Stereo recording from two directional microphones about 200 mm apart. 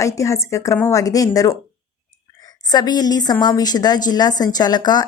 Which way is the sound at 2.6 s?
20° left (ahead or behind).